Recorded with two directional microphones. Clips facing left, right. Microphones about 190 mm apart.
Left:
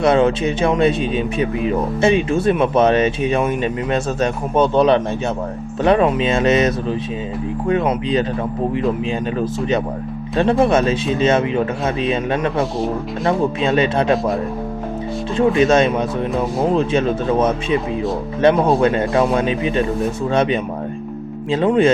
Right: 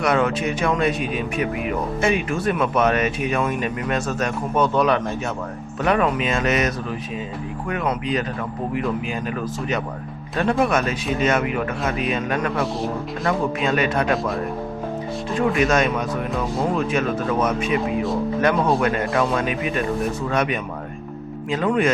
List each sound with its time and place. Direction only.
0.0 s speech: 25° left (ahead or behind)
9.4 s speech: 30° left (ahead or behind)
15.4 s speech: 25° left (ahead or behind)